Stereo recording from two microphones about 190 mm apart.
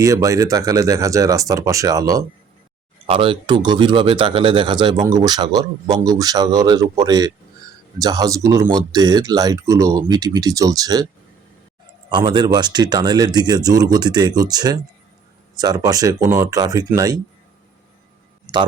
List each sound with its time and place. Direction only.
0.0 s speech: 15° right (ahead or behind)
12.1 s speech: 25° right (ahead or behind)